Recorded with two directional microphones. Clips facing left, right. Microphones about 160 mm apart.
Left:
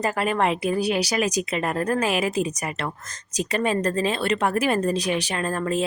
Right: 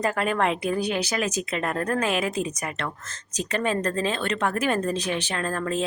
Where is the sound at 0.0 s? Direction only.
5° left (ahead or behind).